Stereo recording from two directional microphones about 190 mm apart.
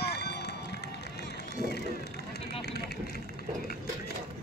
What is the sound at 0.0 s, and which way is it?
Run, 60° left (ahead or behind).